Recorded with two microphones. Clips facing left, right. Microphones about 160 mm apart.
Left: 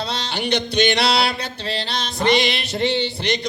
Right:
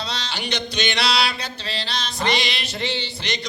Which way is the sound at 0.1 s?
55° left (ahead or behind).